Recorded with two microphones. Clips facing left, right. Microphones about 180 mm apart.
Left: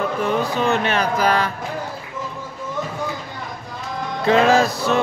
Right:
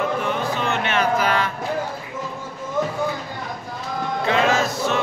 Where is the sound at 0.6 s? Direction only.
40° left (ahead or behind).